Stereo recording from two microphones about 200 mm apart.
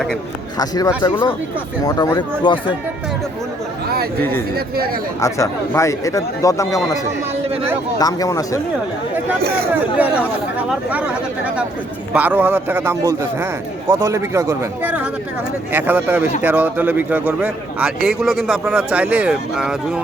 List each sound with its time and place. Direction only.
0.6 s speech: 20° left (ahead or behind)
5.2 s speech: 15° left (ahead or behind)
7.9 s speech: 20° left (ahead or behind)
10.0 s a man's voice: 5° right (ahead or behind)